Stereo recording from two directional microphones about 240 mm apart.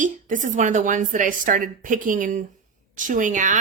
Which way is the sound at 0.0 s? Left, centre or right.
Right.